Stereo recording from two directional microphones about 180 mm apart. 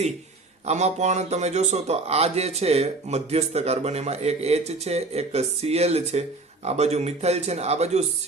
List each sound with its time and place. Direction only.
0.6 s a man's voice: 40° right (ahead or behind)